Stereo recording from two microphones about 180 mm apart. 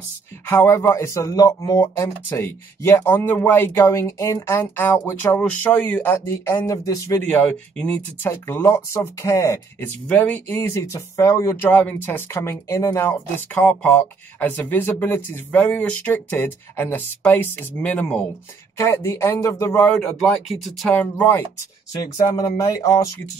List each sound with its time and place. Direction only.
0.5 s speech: 15° left (ahead or behind)
22.0 s speech: 20° left (ahead or behind)